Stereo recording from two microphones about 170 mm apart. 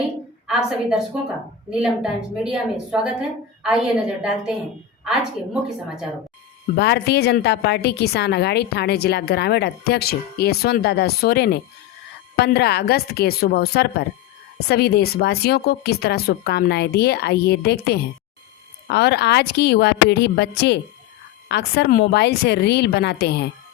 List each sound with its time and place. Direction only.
0.4 s a woman's voice: 5° right (ahead or behind)
5.6 s a woman's voice: 5° right (ahead or behind)
6.7 s a woman's voice: 75° left (ahead or behind)